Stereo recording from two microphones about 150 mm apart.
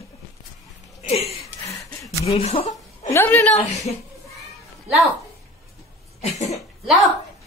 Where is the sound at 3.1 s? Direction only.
15° left (ahead or behind).